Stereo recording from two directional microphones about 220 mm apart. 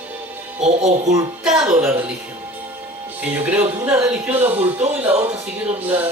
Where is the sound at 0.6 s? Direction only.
30° right (ahead or behind).